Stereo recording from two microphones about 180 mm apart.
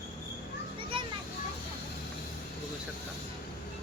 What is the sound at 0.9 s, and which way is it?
Children playing, 30° right (ahead or behind).